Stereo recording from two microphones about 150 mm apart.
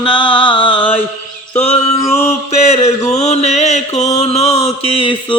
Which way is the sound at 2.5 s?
45° left (ahead or behind).